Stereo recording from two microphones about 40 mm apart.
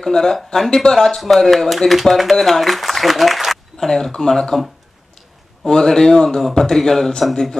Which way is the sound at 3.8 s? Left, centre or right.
Centre.